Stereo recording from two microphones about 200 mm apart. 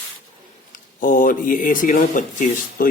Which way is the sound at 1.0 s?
40° left (ahead or behind).